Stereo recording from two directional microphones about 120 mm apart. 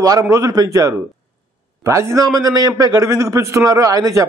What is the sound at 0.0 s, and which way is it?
A man's voice, 30° right (ahead or behind).